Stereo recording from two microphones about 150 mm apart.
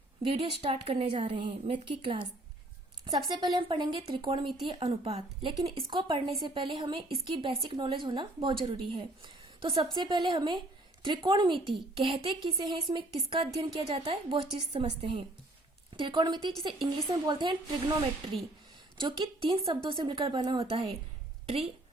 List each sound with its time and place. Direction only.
0.2 s a woman's voice: 40° right (ahead or behind)
3.6 s a woman's voice: 35° right (ahead or behind)